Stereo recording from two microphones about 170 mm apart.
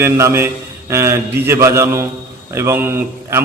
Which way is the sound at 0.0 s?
15° right (ahead or behind).